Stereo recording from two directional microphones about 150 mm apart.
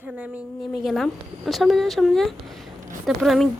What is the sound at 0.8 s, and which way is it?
Speech, centre (ahead or behind).